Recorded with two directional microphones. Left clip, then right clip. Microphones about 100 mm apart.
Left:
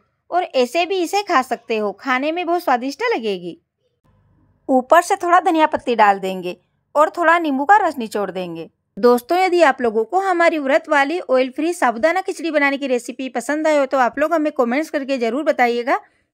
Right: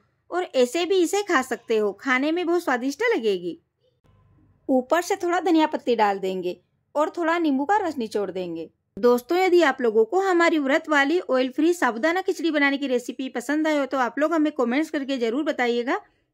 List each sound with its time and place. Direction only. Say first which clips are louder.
0.3 s speech: left 5 dB; 25° left (ahead or behind)
4.6 s speech: left 8 dB; 35° left (ahead or behind)
9.0 s speech: left 5 dB; 50° left (ahead or behind)
10.3 s speech: left 7 dB; 25° left (ahead or behind); by 16.0 s 55° left (ahead or behind)